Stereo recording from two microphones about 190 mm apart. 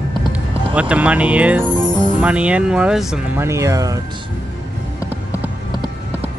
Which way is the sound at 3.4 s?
15° right (ahead or behind).